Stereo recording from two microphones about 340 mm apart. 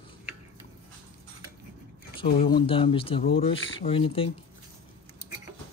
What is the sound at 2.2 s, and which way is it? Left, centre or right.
Speech, centre.